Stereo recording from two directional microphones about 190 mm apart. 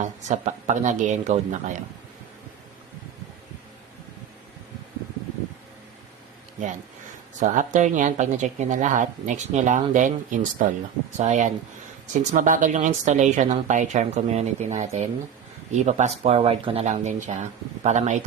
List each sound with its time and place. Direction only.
0.0 s a woman's voice: 40° right (ahead or behind)
7.3 s a woman's voice: 40° right (ahead or behind)